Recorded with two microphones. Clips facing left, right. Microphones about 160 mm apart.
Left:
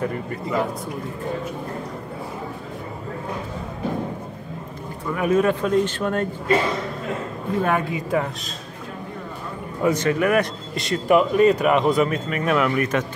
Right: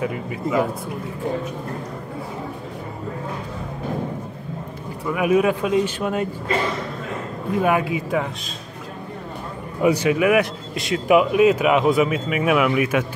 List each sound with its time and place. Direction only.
0.0 s speech: 5° right (ahead or behind)
5.1 s speech: 10° right (ahead or behind)
7.6 s speech: 5° right (ahead or behind)
9.8 s speech: 10° right (ahead or behind)